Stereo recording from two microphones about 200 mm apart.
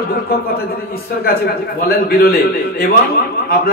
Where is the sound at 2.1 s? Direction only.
50° left (ahead or behind).